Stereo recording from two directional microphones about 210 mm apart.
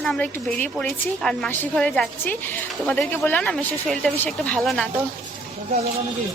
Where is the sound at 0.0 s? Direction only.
Centre (ahead or behind).